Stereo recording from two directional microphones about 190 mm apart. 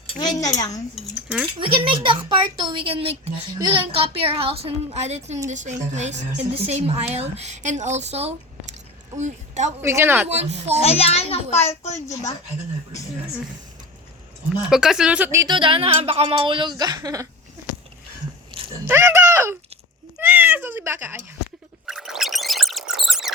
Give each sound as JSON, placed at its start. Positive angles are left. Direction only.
{"t": 0.2, "sound": "a child's voice", "side_deg": 20}
{"t": 1.5, "sound": "a woman's voice", "side_deg": -25}
{"t": 9.8, "sound": "speech", "side_deg": -15}
{"t": 10.2, "sound": "a woman's voice", "side_deg": -35}
{"t": 10.8, "sound": "a child's voice", "side_deg": 30}
{"t": 14.6, "sound": "speech", "side_deg": -5}
{"t": 18.5, "sound": "a sound", "side_deg": -30}
{"t": 18.9, "sound": "speech", "side_deg": -15}
{"t": 21.8, "sound": "gargling", "side_deg": 0}